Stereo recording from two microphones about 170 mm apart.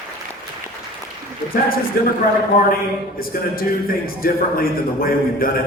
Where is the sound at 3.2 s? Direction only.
60° left (ahead or behind).